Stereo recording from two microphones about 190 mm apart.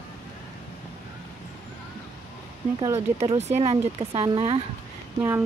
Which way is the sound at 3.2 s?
35° right (ahead or behind).